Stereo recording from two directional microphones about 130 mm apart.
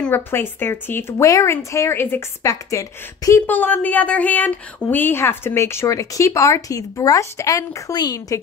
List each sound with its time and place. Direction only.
0.0 s a woman's voice: 15° left (ahead or behind)
3.4 s a woman's voice: 15° left (ahead or behind); by 8.4 s 30° left (ahead or behind)